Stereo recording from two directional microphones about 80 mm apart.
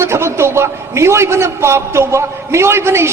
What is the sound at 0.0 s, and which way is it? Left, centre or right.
A man's voice, right.